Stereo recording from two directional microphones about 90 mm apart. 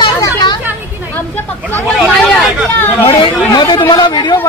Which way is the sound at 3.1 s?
75° left (ahead or behind).